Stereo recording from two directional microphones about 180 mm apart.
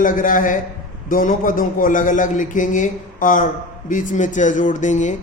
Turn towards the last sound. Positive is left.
turn(degrees=45)  # may be behind; listen again after turning